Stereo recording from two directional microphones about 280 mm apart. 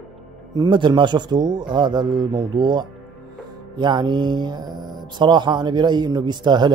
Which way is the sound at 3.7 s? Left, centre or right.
Centre.